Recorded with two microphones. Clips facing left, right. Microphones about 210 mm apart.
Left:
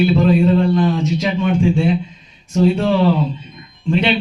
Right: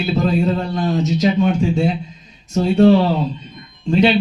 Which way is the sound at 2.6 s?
40° right (ahead or behind).